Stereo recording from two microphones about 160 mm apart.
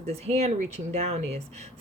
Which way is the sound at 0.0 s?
40° right (ahead or behind).